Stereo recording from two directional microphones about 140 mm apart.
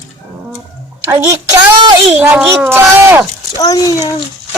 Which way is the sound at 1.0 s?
20° right (ahead or behind).